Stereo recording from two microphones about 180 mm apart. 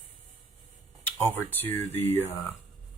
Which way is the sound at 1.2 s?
10° left (ahead or behind).